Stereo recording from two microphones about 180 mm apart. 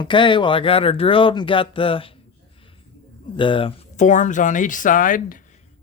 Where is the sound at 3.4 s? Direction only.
30° left (ahead or behind).